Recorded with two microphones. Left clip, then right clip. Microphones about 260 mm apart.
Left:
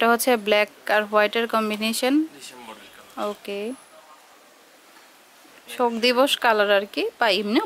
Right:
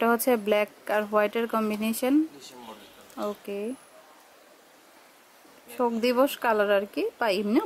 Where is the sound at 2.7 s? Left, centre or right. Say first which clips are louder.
Left 5 dB; right.